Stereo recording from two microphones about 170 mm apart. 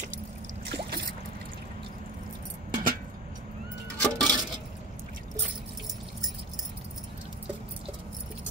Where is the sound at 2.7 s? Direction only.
50° right (ahead or behind).